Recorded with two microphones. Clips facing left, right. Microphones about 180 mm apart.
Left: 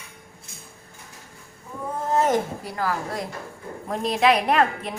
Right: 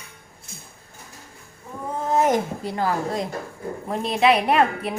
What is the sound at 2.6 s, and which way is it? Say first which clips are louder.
Speech: right 3 dB; 25° right (ahead or behind).